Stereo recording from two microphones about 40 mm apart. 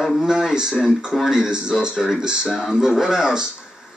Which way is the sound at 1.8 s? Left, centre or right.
Centre.